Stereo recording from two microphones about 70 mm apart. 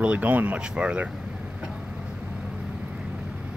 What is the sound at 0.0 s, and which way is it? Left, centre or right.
Speech, right.